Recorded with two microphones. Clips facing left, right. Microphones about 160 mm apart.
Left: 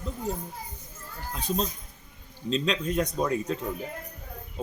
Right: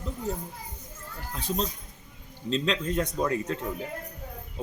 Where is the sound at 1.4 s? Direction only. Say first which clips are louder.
Left 1 dB; 15° left (ahead or behind).